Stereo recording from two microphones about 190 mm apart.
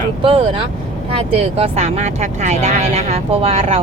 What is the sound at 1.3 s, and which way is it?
Speech, 35° right (ahead or behind).